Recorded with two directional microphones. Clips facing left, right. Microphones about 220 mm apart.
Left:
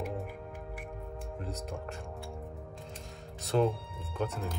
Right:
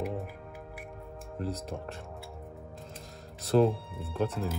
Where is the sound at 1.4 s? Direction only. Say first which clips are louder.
Right 6 dB; centre (ahead or behind).